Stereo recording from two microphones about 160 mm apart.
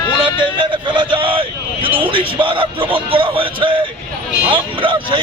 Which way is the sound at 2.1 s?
35° right (ahead or behind).